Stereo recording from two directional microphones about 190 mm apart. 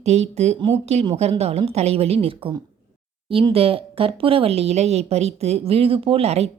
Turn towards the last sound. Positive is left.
turn(degrees=-35)  # may be behind; listen again after turning